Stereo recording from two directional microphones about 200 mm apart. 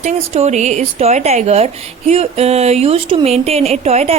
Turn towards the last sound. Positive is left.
turn(degrees=-30)  # may be behind; listen again after turning